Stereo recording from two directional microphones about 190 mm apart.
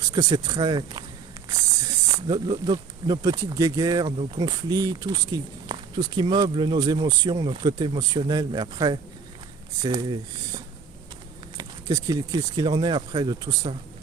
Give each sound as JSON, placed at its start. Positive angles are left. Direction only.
{"t": 0.0, "sound": "speech", "side_deg": -20}